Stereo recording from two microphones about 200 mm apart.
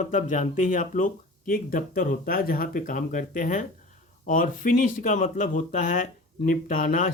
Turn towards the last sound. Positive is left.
turn(degrees=45)  # may be behind; listen again after turning